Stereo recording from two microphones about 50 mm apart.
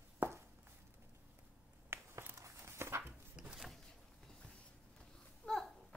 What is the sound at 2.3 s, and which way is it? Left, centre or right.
Walk, right.